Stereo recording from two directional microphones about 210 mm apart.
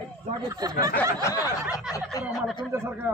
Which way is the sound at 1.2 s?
15° left (ahead or behind).